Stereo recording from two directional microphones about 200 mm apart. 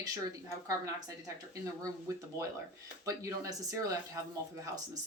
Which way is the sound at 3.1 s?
15° right (ahead or behind).